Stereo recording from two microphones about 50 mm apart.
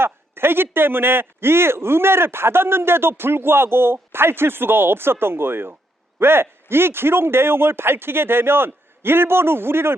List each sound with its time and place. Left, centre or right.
0.0 s a man's voice: right